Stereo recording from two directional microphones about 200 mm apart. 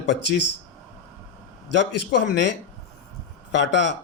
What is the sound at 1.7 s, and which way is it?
Speech, 60° left (ahead or behind).